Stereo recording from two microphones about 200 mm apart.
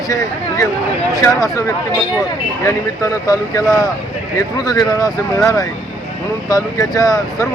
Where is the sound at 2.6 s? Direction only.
15° left (ahead or behind).